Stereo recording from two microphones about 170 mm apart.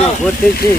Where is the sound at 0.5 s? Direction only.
60° left (ahead or behind).